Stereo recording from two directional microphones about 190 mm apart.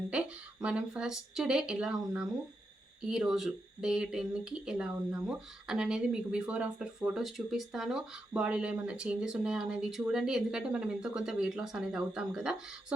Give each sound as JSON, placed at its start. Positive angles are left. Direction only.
{"t": 0.1, "sound": "speech", "side_deg": -5}